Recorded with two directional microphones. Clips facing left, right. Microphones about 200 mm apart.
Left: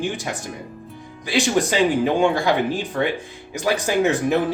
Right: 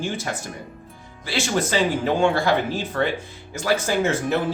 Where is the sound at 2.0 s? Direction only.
15° left (ahead or behind).